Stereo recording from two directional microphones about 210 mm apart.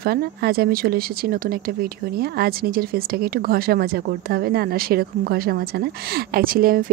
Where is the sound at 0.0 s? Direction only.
50° right (ahead or behind).